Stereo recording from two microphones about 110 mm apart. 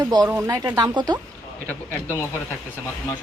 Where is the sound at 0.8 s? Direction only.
40° right (ahead or behind).